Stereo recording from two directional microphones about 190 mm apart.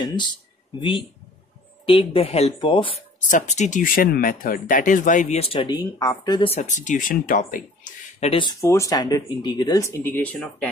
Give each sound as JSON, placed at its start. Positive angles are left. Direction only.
{"t": 0.0, "sound": "speech", "side_deg": 25}
{"t": 3.2, "sound": "speech", "side_deg": 40}
{"t": 8.3, "sound": "speech", "side_deg": 25}